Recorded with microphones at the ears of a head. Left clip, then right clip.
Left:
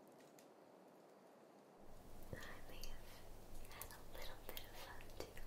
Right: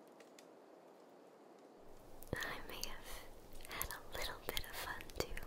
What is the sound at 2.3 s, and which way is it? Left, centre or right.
Whispering, right.